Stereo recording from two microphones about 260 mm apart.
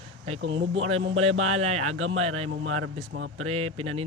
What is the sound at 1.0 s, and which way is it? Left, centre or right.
Speech, right.